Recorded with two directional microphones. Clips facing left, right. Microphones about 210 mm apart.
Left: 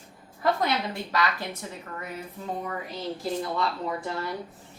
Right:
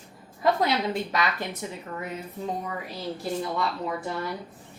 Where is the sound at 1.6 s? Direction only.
20° right (ahead or behind).